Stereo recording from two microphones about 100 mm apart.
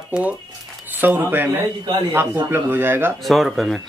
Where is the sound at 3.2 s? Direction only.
Centre (ahead or behind).